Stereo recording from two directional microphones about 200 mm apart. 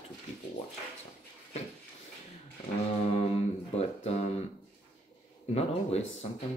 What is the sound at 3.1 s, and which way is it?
Speech, 30° left (ahead or behind).